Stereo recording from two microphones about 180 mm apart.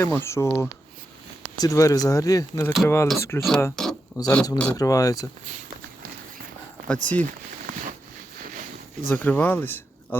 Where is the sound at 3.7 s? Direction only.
5° left (ahead or behind).